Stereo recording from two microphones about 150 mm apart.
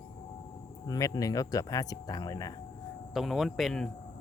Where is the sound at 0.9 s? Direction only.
25° left (ahead or behind).